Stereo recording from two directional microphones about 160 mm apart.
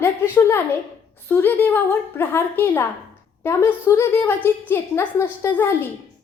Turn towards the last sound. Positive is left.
turn(degrees=15)  # may be behind; listen again after turning